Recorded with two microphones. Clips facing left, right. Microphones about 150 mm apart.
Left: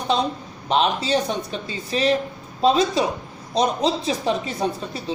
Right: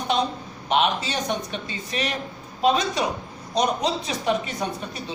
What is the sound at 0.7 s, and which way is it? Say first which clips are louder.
Speech: left 3 dB; 35° left (ahead or behind).